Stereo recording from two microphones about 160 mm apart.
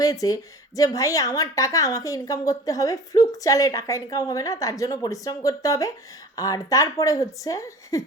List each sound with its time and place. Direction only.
0.0 s a woman's voice: 20° left (ahead or behind)